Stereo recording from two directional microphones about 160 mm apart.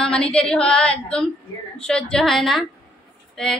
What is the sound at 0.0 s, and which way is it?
A woman's voice, 5° left (ahead or behind).